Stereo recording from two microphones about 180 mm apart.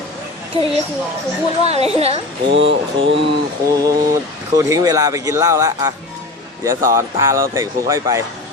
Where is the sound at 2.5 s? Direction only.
85° right.